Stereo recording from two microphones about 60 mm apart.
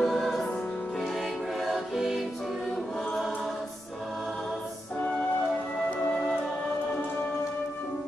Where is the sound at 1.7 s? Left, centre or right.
Centre.